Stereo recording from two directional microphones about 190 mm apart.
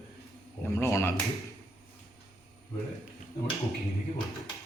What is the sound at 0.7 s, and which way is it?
Speech, 15° left (ahead or behind).